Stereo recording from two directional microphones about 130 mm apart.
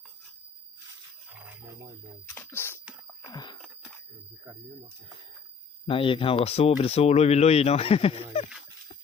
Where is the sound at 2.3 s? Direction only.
15° left (ahead or behind).